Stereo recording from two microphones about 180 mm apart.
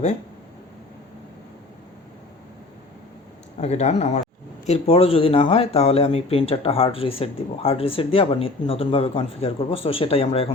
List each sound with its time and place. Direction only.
3.6 s speech: 35° left (ahead or behind)